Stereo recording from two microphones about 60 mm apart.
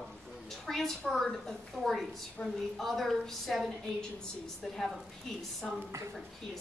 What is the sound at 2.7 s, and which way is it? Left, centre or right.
A woman's voice, centre.